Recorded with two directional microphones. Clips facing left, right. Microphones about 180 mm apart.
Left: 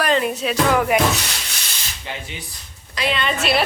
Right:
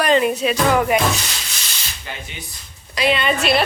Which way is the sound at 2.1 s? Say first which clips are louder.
Left 2 dB; 25° left (ahead or behind).